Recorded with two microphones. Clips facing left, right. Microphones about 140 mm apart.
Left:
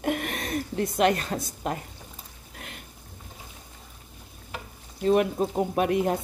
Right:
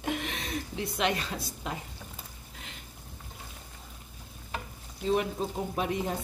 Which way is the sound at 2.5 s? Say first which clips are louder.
Left 6 dB; 55° left (ahead or behind).